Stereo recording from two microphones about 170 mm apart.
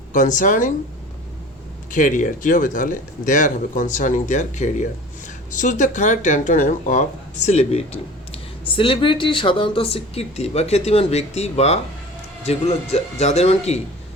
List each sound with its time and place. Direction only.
0.1 s speech: 50° left (ahead or behind)
1.9 s speech: 50° left (ahead or behind)